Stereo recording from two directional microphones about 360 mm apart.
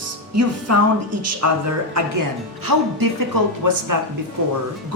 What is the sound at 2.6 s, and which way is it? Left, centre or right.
Speech, right.